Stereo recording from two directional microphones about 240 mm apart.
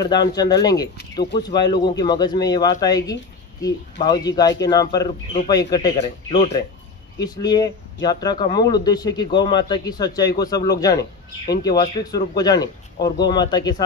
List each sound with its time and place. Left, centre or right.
0.0 s speech: centre
7.2 s speech: centre